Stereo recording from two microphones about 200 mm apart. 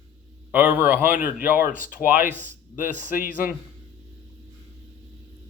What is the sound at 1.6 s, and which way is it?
Speech, 45° left (ahead or behind).